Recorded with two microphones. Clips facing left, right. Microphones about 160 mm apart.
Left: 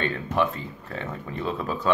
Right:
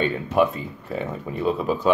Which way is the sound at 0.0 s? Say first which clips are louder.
Right 5 dB; 10° right (ahead or behind).